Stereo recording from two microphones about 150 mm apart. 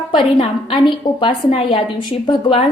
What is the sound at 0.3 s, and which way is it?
A woman's voice, 35° left (ahead or behind).